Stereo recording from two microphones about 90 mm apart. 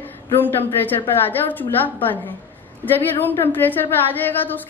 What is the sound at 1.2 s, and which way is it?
A woman's voice, 20° left (ahead or behind).